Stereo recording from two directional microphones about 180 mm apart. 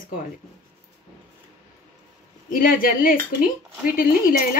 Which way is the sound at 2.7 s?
50° left (ahead or behind).